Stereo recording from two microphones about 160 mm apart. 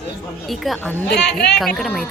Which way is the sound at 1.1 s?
90° left.